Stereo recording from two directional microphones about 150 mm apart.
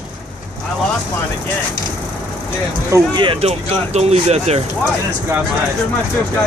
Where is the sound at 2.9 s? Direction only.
30° right (ahead or behind).